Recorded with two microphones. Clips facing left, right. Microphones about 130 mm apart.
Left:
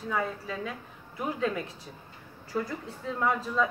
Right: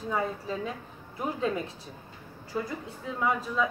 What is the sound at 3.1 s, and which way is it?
Speech, 5° right (ahead or behind).